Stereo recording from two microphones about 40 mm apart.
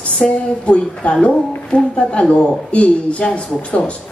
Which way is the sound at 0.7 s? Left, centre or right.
Left.